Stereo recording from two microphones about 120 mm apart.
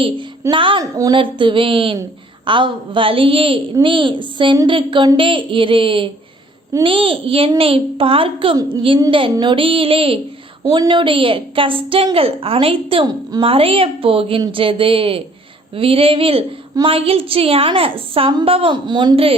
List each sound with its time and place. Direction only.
0.5 s a woman's voice: 45° right (ahead or behind)
10.6 s a woman's voice: 40° right (ahead or behind)